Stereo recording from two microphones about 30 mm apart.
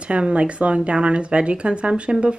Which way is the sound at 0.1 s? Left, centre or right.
Right.